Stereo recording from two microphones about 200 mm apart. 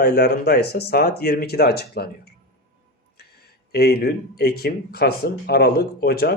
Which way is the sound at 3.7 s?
55° left (ahead or behind).